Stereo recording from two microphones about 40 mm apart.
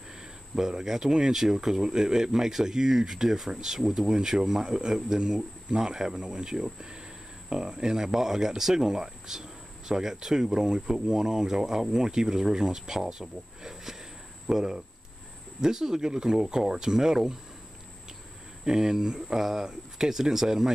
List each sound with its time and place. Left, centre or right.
0.6 s speech: centre
18.6 s speech: centre